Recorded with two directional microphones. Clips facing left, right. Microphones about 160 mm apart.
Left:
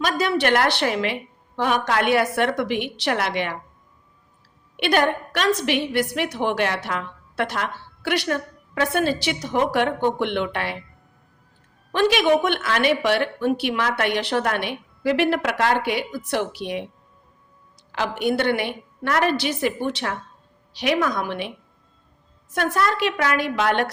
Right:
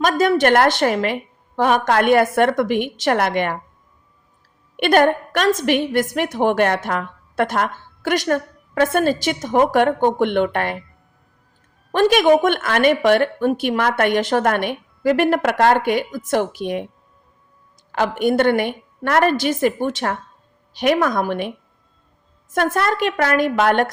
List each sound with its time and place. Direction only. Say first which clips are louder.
0.0 s a woman's voice: right 5 dB; 45° right (ahead or behind)
4.8 s a woman's voice: right 5 dB; 50° right (ahead or behind)
11.9 s a woman's voice: right 4 dB; 50° right (ahead or behind)
17.9 s a woman's voice: right 5 dB; 50° right (ahead or behind)